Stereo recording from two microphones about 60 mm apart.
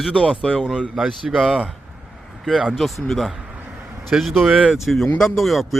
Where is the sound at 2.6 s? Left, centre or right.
Centre.